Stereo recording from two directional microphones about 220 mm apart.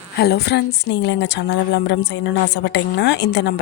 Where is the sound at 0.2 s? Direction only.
45° left (ahead or behind).